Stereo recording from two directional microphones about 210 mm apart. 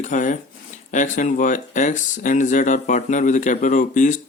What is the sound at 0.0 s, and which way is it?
Speech, 35° left (ahead or behind).